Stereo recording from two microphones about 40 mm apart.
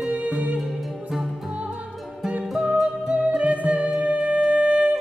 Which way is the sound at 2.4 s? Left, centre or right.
Centre.